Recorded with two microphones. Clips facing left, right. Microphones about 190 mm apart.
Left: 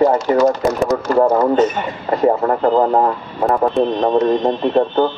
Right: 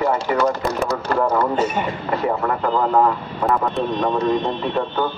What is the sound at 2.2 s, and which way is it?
Speech, 40° left (ahead or behind).